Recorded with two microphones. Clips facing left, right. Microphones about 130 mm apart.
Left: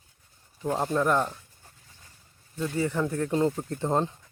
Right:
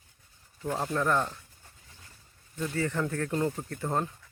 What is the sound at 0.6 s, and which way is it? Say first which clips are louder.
Speech: left 4 dB; 20° left (ahead or behind).